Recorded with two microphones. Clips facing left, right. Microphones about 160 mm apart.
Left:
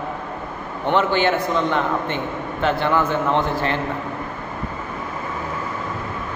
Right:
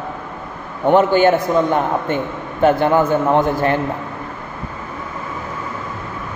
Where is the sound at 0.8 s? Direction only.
45° right (ahead or behind).